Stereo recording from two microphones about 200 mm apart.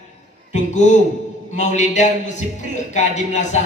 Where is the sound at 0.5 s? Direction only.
35° left (ahead or behind).